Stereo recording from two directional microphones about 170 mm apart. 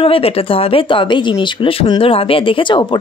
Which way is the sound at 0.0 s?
35° left (ahead or behind).